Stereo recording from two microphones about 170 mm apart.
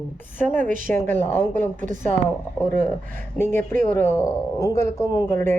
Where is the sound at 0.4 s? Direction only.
50° right (ahead or behind).